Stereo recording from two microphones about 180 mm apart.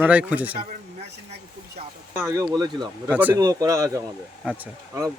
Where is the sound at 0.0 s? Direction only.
5° right (ahead or behind).